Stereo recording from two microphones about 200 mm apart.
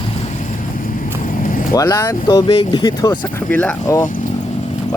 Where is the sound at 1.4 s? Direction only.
45° left (ahead or behind).